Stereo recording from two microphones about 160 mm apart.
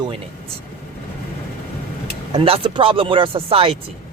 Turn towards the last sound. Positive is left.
turn(degrees=-35)  # may be behind; listen again after turning